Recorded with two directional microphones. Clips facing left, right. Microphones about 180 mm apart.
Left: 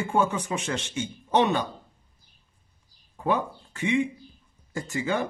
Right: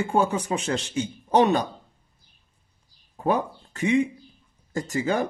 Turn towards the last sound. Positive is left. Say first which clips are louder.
# right 3 dB
turn(degrees=-40)  # may be behind; listen again after turning